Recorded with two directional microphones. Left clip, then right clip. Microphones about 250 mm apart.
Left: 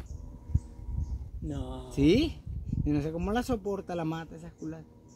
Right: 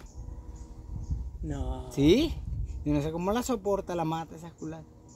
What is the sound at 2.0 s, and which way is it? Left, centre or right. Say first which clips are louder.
A man's voice: right 2 dB; right.